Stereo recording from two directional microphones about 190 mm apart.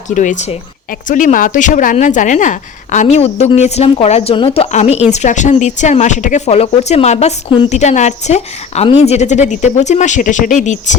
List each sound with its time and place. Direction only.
0.1 s speech: 40° left (ahead or behind)